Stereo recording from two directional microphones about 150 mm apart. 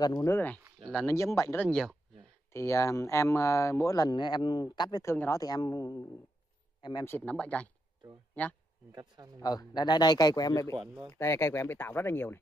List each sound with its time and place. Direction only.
0.0 s speech: 20° left (ahead or behind)
1.1 s speech: 20° left (ahead or behind)
1.6 s speech: 5° left (ahead or behind)
2.5 s speech: 20° left (ahead or behind)
5.0 s speech: 15° left (ahead or behind)
7.1 s speech: 10° left (ahead or behind)
8.9 s a man's voice: 25° right (ahead or behind)
9.4 s speech: 25° left (ahead or behind)